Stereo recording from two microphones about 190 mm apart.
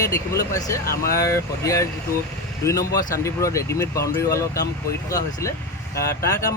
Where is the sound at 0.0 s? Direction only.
15° left (ahead or behind).